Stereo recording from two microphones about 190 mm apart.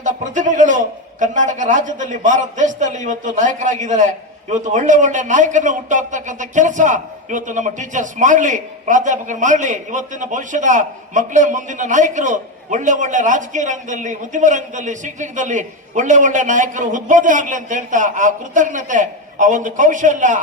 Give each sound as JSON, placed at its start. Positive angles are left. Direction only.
{"t": 0.0, "sound": "a man's voice", "side_deg": -40}